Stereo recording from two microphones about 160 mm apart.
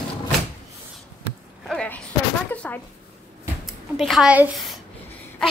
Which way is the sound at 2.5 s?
10° left (ahead or behind).